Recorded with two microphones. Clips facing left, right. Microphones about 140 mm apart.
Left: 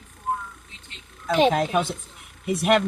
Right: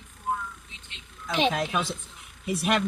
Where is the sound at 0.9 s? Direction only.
45° left (ahead or behind); by 2.8 s 65° left (ahead or behind).